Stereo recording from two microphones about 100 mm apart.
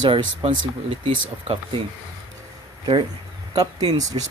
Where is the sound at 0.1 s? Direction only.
65° right (ahead or behind).